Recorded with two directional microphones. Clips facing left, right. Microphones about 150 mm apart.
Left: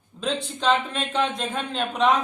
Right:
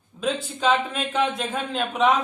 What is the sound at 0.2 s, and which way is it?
A man's voice, 5° right (ahead or behind).